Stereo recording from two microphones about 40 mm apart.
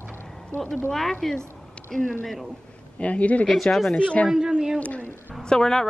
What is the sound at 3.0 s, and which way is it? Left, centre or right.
Speech, left.